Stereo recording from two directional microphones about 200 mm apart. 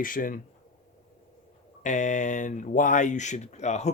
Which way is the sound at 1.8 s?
35° left (ahead or behind).